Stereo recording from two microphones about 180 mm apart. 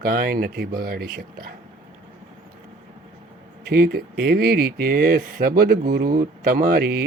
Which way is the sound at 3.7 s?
55° right (ahead or behind).